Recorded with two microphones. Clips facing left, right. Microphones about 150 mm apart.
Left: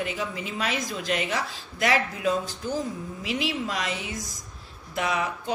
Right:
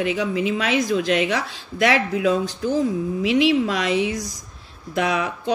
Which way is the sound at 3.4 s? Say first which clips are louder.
Right 10 dB; 75° right (ahead or behind).